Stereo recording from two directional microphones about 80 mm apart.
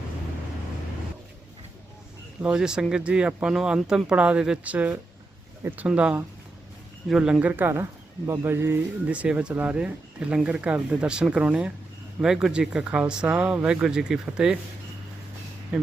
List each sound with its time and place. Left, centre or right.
2.4 s speech: centre; by 8.8 s right
9.0 s speech: centre
15.7 s speech: centre